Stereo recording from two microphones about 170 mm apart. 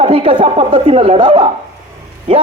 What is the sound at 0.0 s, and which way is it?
A man's voice, 35° right (ahead or behind).